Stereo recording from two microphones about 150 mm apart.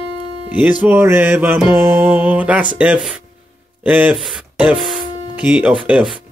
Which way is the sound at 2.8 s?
5° right (ahead or behind).